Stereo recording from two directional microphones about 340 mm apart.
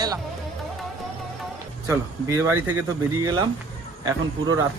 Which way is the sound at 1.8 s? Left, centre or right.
Centre.